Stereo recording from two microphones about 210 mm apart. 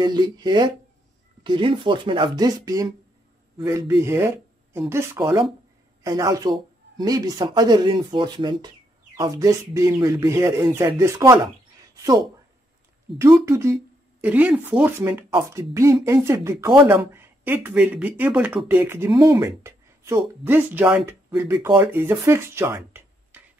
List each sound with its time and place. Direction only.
0.0 s speech: 20° right (ahead or behind)
11.9 s a sound: 15° right (ahead or behind)
13.5 s speech: 15° right (ahead or behind)